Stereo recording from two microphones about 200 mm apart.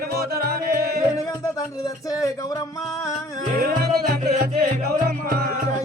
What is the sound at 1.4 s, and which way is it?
Music, 20° left (ahead or behind).